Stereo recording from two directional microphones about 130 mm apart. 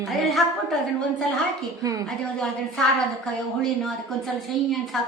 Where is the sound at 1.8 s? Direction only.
25° right (ahead or behind).